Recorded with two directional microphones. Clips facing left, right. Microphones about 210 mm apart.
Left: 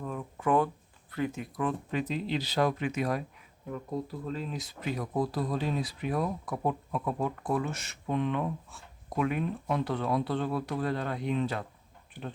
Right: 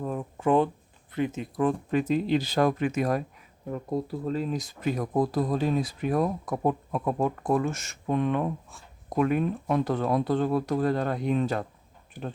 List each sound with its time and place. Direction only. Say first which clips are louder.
0.0 s a sound: right 5 dB; 35° right (ahead or behind)
1.1 s speech: right 4 dB; 20° right (ahead or behind)
1.5 s speech: right 7 dB; 40° right (ahead or behind)